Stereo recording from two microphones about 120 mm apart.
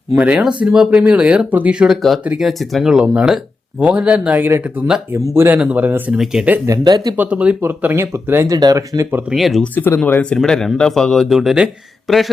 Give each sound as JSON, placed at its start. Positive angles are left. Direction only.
{"t": 0.2, "sound": "speech", "side_deg": -10}
{"t": 2.2, "sound": "speech", "side_deg": -10}
{"t": 2.5, "sound": "speech", "side_deg": 0}
{"t": 6.7, "sound": "speech", "side_deg": -35}
{"t": 7.2, "sound": "speech", "side_deg": -10}
{"t": 9.3, "sound": "speech", "side_deg": 0}
{"t": 9.7, "sound": "speech", "side_deg": 15}